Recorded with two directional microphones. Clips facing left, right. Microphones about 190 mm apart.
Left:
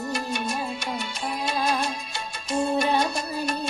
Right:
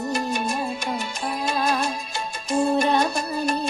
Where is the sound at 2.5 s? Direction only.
40° right (ahead or behind).